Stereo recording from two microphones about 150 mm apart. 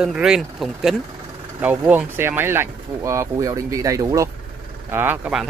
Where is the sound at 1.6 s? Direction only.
10° right (ahead or behind).